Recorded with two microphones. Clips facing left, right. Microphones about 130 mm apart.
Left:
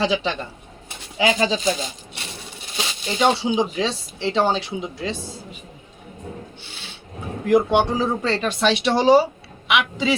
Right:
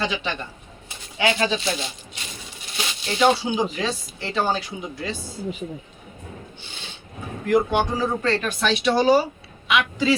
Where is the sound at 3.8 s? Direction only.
25° left (ahead or behind).